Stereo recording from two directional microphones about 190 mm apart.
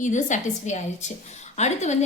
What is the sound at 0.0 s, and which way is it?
A woman's voice, 40° left (ahead or behind).